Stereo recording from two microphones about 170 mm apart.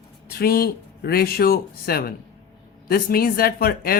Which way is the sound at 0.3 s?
65° left (ahead or behind).